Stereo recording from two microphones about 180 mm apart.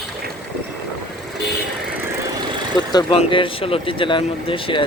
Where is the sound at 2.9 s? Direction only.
25° left (ahead or behind).